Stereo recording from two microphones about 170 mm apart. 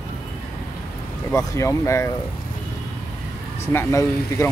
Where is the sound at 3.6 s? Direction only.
15° left (ahead or behind).